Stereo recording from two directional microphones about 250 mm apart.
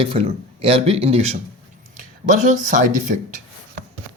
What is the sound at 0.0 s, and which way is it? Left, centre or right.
A man's voice, right.